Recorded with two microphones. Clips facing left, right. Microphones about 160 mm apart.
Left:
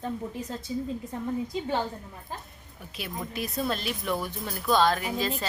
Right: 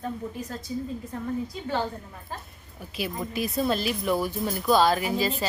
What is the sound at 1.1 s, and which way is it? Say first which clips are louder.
Speech: right 1 dB; 20° left (ahead or behind).